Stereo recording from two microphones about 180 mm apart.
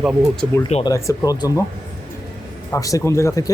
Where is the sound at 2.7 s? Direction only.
20° left (ahead or behind).